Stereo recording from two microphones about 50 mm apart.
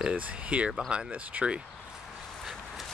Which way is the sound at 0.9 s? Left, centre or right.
Centre.